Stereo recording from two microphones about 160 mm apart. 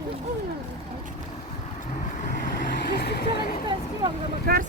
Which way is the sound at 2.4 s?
75° left (ahead or behind).